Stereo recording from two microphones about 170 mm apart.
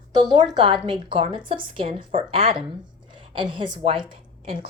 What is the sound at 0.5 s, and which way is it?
A woman's voice, 30° right (ahead or behind).